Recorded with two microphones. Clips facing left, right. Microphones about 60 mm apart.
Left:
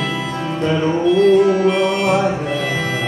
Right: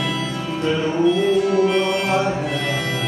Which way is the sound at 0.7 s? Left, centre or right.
Centre.